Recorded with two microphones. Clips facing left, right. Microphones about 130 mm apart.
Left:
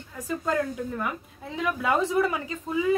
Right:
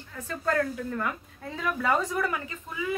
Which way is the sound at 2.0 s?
25° left (ahead or behind).